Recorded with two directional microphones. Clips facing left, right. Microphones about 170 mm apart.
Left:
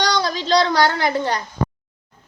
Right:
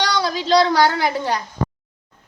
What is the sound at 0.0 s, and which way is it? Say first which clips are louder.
A woman's voice: even; 5° right (ahead or behind).